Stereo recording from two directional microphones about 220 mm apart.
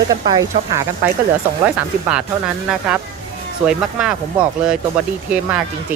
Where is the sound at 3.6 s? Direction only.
5° right (ahead or behind).